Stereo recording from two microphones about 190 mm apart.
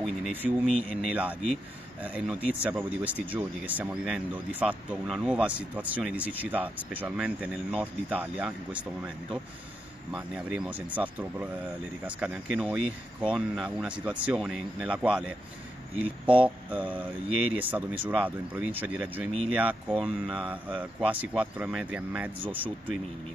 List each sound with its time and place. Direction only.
0.0 s speech: centre (ahead or behind)
10.1 s speech: 5° right (ahead or behind)